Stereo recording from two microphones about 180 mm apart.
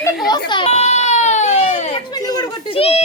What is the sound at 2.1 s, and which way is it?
Speech, 20° left (ahead or behind).